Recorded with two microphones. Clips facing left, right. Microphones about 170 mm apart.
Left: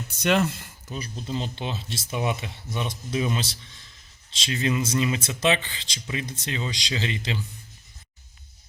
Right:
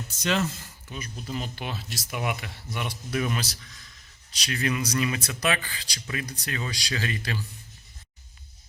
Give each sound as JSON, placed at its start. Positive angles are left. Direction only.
{"t": 0.2, "sound": "speech", "side_deg": 60}
{"t": 0.9, "sound": "speech", "side_deg": 35}